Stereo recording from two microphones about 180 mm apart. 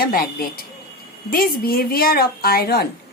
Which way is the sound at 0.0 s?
55° left (ahead or behind).